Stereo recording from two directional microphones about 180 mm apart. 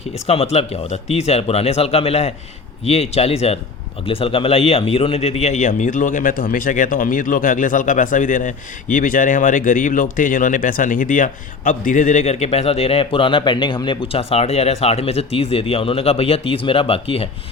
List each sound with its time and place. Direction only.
0.3 s speech: 35° left (ahead or behind)